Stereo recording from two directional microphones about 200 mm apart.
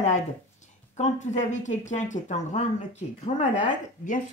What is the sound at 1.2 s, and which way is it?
Speech, 35° left (ahead or behind).